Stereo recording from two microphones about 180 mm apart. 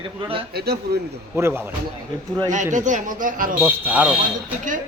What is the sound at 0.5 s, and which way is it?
Speech, 60° right (ahead or behind).